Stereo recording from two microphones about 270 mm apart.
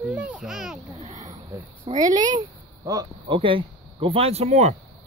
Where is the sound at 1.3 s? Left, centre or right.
Centre.